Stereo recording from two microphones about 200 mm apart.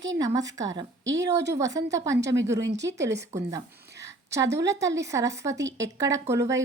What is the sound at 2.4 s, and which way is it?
Speech, 65° right (ahead or behind).